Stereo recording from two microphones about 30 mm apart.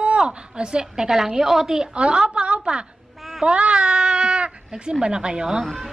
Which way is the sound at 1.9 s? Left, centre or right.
Right.